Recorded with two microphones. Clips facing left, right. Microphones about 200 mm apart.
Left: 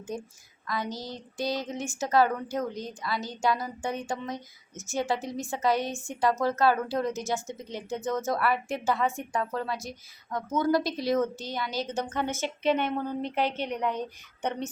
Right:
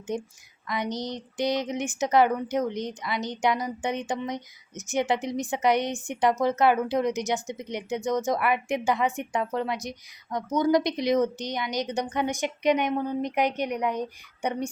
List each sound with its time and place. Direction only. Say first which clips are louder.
0.1 s speech: right 6 dB; 20° right (ahead or behind)